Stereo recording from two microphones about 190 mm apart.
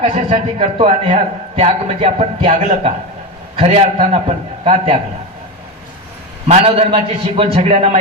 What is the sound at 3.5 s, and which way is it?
A man's voice, 35° right (ahead or behind).